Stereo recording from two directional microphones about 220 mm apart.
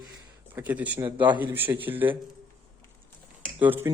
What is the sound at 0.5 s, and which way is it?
Speech, 10° right (ahead or behind).